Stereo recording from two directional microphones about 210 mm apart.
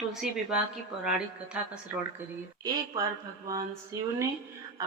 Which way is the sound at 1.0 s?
5° right (ahead or behind).